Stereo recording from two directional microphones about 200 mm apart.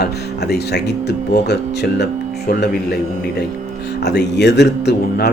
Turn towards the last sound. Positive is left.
turn(degrees=55)  # may be behind; listen again after turning